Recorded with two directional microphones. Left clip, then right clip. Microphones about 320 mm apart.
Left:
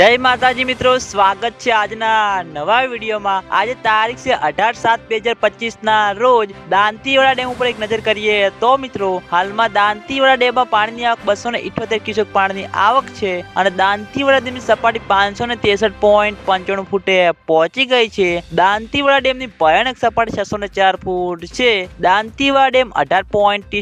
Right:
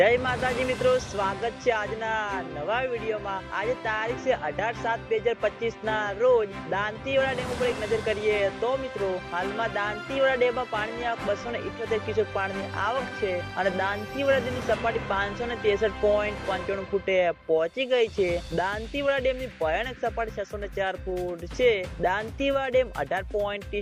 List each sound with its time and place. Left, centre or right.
0.0 s speech: left